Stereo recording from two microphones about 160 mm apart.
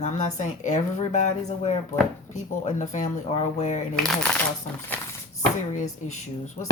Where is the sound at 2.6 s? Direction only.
45° left (ahead or behind).